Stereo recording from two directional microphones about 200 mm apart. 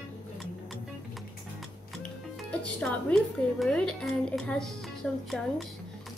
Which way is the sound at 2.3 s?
5° left (ahead or behind).